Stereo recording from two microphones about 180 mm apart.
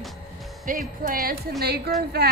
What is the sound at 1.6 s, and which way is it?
Speech, 65° right (ahead or behind).